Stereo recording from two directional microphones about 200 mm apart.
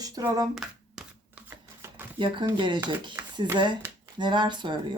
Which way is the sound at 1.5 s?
10° right (ahead or behind).